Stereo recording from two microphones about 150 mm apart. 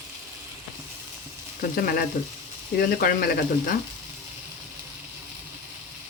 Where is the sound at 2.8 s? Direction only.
80° left.